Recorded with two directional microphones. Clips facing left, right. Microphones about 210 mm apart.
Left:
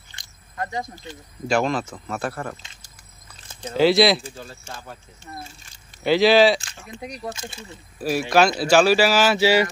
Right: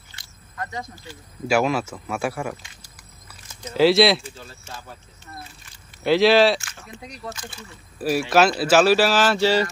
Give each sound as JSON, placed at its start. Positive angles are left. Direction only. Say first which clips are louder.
{"t": 0.6, "sound": "speech", "louder": "left 3 dB", "side_deg": 30}
{"t": 1.5, "sound": "speech", "louder": "right 1 dB", "side_deg": -5}
{"t": 3.7, "sound": "speech", "louder": "right 1 dB", "side_deg": 0}
{"t": 6.0, "sound": "speech", "louder": "even", "side_deg": 0}
{"t": 6.8, "sound": "speech", "louder": "left 4 dB", "side_deg": 15}
{"t": 8.3, "sound": "speech", "louder": "left 1 dB", "side_deg": -5}